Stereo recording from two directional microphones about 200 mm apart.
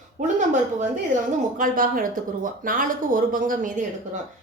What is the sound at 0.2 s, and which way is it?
Speech, 35° right (ahead or behind).